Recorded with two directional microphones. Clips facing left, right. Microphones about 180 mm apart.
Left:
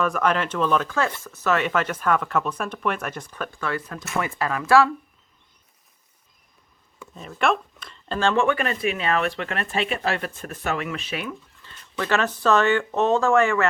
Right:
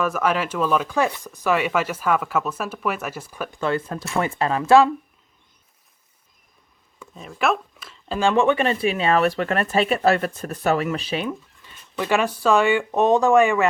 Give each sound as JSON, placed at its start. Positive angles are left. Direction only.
{"t": 0.0, "sound": "speech", "side_deg": -5}
{"t": 3.5, "sound": "speech", "side_deg": -25}
{"t": 7.0, "sound": "speech", "side_deg": 0}
{"t": 11.6, "sound": "speech", "side_deg": -15}